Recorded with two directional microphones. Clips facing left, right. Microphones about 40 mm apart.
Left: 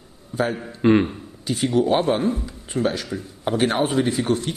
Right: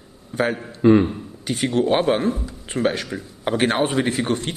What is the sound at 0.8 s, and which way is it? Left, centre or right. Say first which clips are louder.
Speech: right 2 dB; centre.